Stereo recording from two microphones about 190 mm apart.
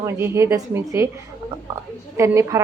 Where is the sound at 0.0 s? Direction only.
15° right (ahead or behind).